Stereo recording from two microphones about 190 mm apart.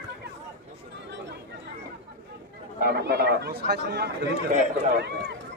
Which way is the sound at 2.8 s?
60° right (ahead or behind).